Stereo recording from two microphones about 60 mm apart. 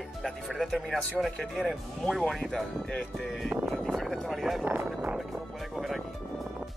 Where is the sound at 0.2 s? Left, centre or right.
Centre.